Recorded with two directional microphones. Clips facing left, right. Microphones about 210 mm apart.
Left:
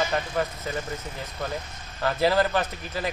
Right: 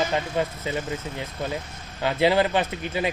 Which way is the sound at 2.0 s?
20° right (ahead or behind).